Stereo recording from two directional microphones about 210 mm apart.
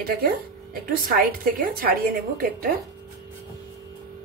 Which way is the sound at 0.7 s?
45° right (ahead or behind).